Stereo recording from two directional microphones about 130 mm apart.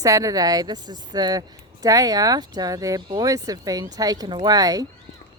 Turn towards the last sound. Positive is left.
turn(degrees=-30)  # may be behind; listen again after turning